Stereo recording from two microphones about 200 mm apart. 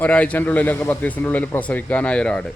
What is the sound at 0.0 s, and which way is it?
Speech, 5° left (ahead or behind).